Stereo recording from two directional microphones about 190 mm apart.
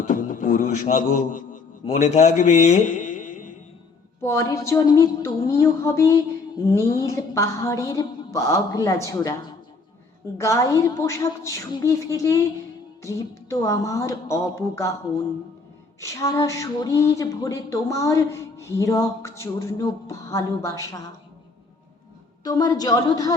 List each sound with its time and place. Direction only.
0.1 s a man's voice: 45° left (ahead or behind)
4.2 s speech: 15° left (ahead or behind)
10.3 s speech: 15° left (ahead or behind)
16.0 s speech: 15° left (ahead or behind)
22.4 s a woman's voice: 20° left (ahead or behind)